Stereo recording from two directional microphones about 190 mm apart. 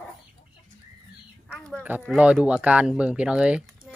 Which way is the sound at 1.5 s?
Centre (ahead or behind).